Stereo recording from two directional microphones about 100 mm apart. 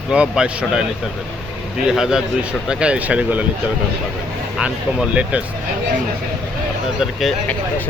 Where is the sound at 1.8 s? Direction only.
5° right (ahead or behind).